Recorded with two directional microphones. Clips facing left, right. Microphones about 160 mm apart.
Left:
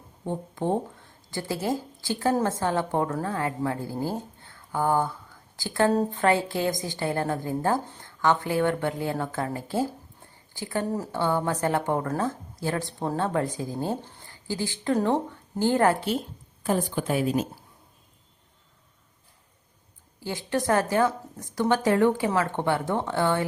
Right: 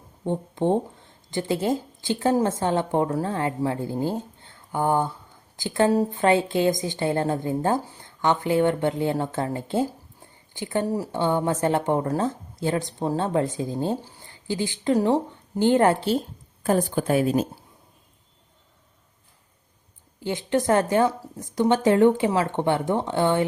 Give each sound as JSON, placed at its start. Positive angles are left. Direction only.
{"t": 0.3, "sound": "speech", "side_deg": -20}
{"t": 5.9, "sound": "speech", "side_deg": -10}
{"t": 6.2, "sound": "speech", "side_deg": -20}
{"t": 16.6, "sound": "a woman's voice", "side_deg": -45}
{"t": 20.1, "sound": "speech", "side_deg": -20}